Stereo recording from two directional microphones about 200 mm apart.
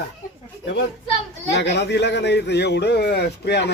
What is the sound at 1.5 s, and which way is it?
A man's voice, 60° left (ahead or behind).